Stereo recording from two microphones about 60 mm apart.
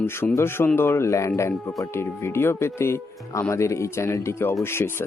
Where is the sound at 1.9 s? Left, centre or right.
Left.